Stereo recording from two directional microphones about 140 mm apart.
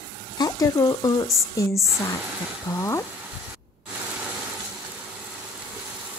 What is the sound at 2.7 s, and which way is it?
Speech, 20° left (ahead or behind).